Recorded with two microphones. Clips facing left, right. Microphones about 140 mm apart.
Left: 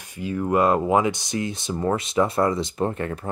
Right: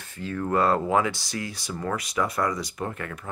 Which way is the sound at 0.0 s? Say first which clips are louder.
Left 4 dB; 15° left (ahead or behind).